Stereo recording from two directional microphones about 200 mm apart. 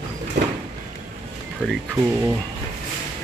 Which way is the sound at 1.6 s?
5° left (ahead or behind).